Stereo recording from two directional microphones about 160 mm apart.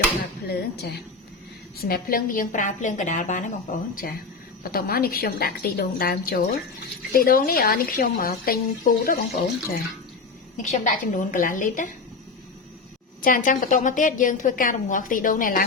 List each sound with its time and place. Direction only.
0.4 s a woman's voice: 80° left
1.8 s a woman's voice: 65° left (ahead or behind)
4.0 s a woman's voice: 65° left (ahead or behind)
13.2 s a woman's voice: 55° left (ahead or behind)